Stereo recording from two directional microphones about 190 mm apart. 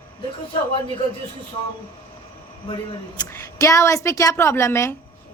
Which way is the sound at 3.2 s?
15° left (ahead or behind).